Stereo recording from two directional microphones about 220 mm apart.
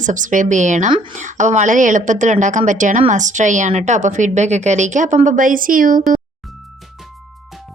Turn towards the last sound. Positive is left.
turn(degrees=-40)  # may be behind; listen again after turning